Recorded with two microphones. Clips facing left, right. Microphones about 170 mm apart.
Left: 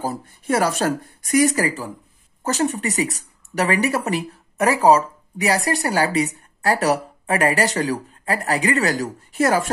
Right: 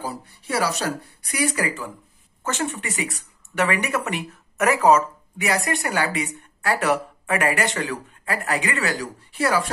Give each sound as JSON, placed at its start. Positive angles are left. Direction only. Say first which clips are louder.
{"t": 0.0, "sound": "speech", "louder": "left 5 dB", "side_deg": 45}